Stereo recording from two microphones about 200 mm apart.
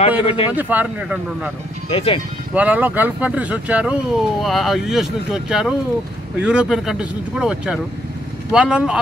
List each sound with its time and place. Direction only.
0.2 s speech: 30° left (ahead or behind)
0.5 s speech: 10° right (ahead or behind)
1.9 s speech: 25° left (ahead or behind)
2.5 s speech: 10° right (ahead or behind)